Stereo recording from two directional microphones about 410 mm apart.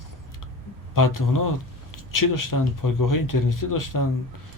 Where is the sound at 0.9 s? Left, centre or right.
Left.